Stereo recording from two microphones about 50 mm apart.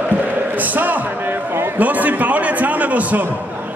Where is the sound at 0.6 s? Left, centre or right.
Right.